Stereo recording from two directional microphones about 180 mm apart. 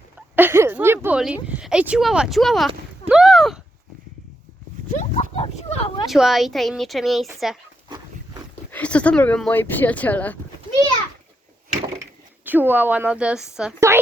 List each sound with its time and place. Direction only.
0.2 s a woman's voice: 10° right (ahead or behind)
4.9 s a sound: 45° left (ahead or behind)
5.3 s speech: 35° left (ahead or behind)
6.1 s speech: centre (ahead or behind)
7.9 s dog: 20° right (ahead or behind)
8.7 s speech: 5° left (ahead or behind)
12.5 s a woman's voice: 10° right (ahead or behind)
13.7 s a woman's voice: 15° right (ahead or behind)